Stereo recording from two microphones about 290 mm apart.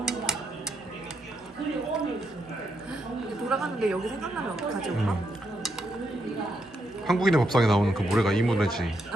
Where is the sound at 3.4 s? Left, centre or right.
Centre.